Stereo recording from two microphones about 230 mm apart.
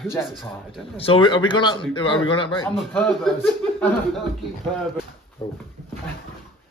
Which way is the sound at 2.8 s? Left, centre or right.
Centre.